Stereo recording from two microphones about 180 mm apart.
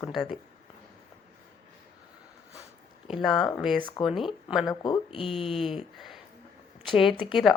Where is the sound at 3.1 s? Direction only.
Centre (ahead or behind).